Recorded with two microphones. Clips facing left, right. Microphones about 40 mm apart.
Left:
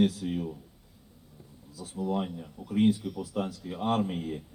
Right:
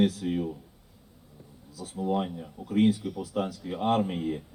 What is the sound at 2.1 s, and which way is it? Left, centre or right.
Speech, right.